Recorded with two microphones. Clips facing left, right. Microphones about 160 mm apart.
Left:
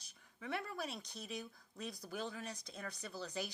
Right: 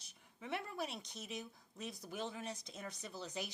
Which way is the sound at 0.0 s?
25° right (ahead or behind).